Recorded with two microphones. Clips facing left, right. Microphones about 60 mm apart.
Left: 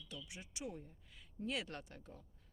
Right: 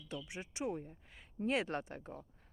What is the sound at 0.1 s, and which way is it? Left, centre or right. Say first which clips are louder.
Speech: right 8 dB; right.